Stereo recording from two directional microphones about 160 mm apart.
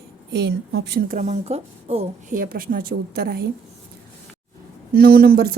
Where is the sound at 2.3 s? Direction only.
65° right (ahead or behind); by 3.4 s 80° right.